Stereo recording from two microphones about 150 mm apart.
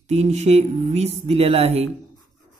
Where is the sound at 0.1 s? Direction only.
50° right (ahead or behind).